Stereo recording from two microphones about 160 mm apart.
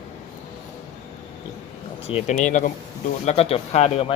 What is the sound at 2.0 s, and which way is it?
Speech, 45° left (ahead or behind).